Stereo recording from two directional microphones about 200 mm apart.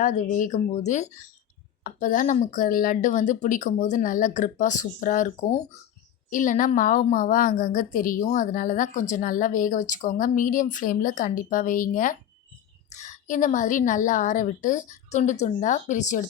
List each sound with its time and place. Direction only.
0.0 s a woman's voice: 40° left (ahead or behind)